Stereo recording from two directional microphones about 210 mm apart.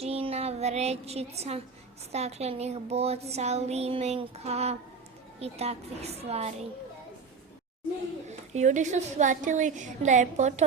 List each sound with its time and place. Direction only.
0.0 s child singing: 30° right (ahead or behind)
2.1 s a woman's voice: 30° right (ahead or behind)
8.3 s a woman's voice: 35° right (ahead or behind)